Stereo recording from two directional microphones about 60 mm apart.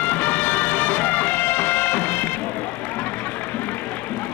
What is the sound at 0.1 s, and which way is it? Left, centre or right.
Music, left.